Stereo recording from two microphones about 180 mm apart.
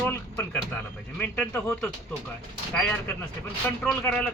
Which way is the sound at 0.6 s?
10° left (ahead or behind).